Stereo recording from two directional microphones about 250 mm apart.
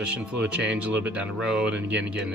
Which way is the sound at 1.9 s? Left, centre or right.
Right.